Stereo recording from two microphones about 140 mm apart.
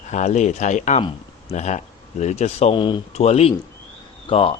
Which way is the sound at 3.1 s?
50° left (ahead or behind).